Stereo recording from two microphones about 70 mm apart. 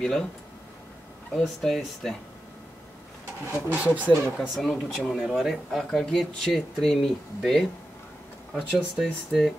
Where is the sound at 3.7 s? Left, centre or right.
Right.